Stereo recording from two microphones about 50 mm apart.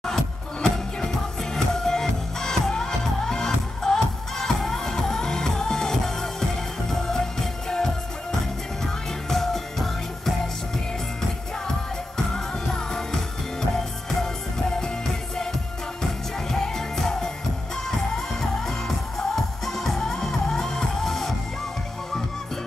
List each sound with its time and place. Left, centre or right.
0.0 s music: centre
12.6 s music: centre
16.0 s music: centre
18.7 s music: centre